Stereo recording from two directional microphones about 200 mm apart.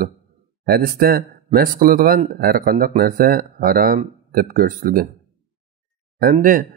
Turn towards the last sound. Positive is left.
turn(degrees=-45)  # may be behind; listen again after turning